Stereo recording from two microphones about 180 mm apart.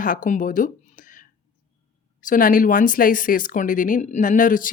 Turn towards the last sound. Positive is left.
turn(degrees=50)  # may be behind; listen again after turning